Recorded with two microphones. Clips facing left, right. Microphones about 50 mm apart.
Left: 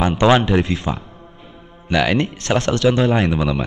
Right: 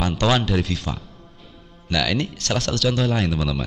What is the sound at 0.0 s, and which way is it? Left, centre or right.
A man's voice, left.